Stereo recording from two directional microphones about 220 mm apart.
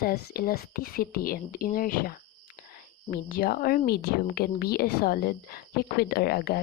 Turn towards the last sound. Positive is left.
turn(degrees=45)  # may be behind; listen again after turning